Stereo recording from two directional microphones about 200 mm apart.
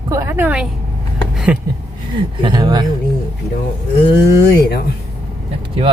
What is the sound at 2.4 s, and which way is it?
Speech, 20° right (ahead or behind).